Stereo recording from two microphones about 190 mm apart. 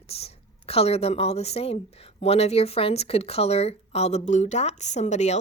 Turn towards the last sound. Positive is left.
turn(degrees=35)  # may be behind; listen again after turning